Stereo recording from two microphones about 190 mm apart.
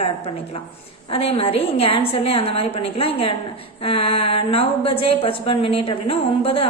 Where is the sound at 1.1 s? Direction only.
30° left (ahead or behind).